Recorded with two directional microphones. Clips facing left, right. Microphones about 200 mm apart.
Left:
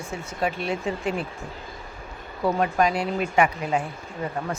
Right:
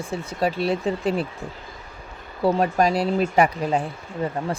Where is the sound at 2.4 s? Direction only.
35° right (ahead or behind).